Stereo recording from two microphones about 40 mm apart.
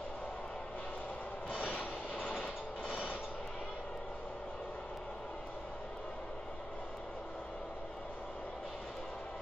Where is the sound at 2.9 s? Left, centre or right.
Centre.